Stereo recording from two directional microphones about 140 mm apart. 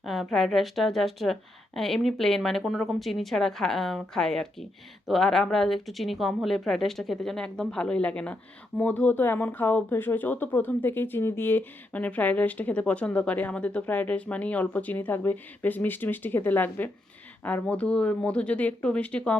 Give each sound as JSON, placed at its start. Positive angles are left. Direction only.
{"t": 0.0, "sound": "a woman's voice", "side_deg": 0}